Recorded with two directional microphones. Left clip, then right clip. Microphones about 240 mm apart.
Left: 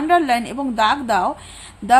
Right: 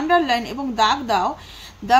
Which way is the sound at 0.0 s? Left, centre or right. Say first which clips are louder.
Left 2 dB; centre.